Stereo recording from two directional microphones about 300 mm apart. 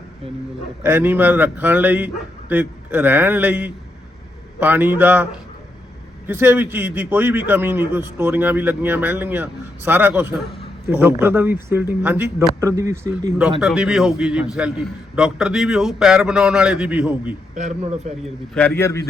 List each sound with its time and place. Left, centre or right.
0.8 s a man's voice: centre
17.5 s speech: right
18.5 s a man's voice: centre